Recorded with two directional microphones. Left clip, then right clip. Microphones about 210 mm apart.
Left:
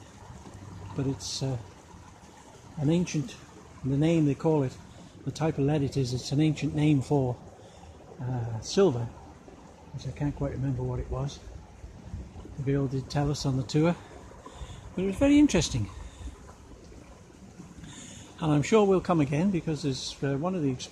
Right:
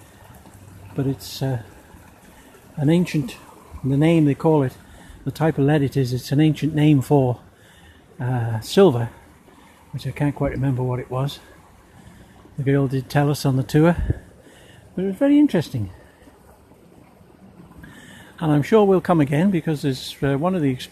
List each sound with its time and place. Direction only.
0.9 s speech: 40° right (ahead or behind)
2.8 s speech: 40° right (ahead or behind)
10.1 s speech: 45° right (ahead or behind)
12.6 s speech: 40° right (ahead or behind)
15.0 s speech: 25° right (ahead or behind)
18.4 s speech: 30° right (ahead or behind)